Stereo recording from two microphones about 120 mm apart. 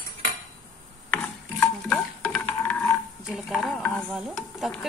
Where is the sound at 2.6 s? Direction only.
10° left (ahead or behind).